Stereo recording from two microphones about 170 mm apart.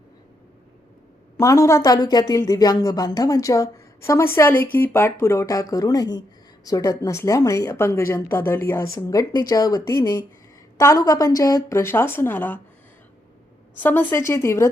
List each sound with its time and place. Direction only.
1.4 s speech: 20° left (ahead or behind)
13.7 s speech: 10° left (ahead or behind)